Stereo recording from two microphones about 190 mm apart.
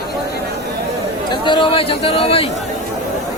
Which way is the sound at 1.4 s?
25° left (ahead or behind).